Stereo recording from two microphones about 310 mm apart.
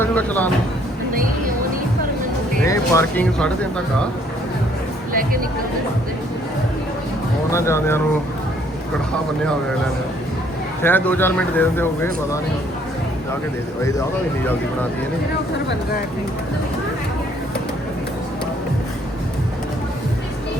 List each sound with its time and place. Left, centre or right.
0.0 s speech: centre
2.6 s speech: centre
5.1 s speech: right
7.5 s speech: centre
10.8 s speech: centre